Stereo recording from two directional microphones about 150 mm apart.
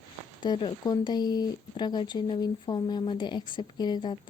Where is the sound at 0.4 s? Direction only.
30° left (ahead or behind).